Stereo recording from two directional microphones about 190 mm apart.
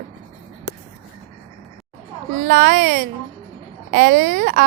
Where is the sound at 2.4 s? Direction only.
45° right (ahead or behind).